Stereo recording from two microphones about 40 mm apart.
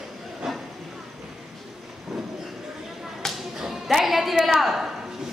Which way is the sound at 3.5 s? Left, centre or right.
Centre.